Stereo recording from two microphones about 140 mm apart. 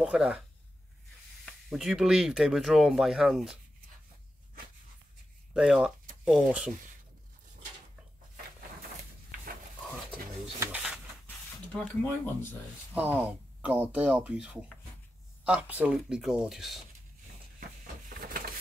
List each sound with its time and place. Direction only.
0.0 s speech: 5° right (ahead or behind)
1.4 s speech: centre (ahead or behind)
5.5 s speech: 5° right (ahead or behind)
11.2 s speech: 10° left (ahead or behind)
12.9 s speech: 10° right (ahead or behind)
18.1 s vehicle: 90° right